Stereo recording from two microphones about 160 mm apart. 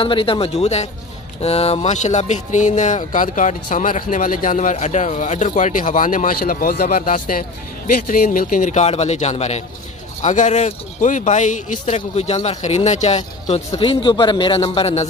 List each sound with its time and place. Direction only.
0.0 s speech: 35° left (ahead or behind)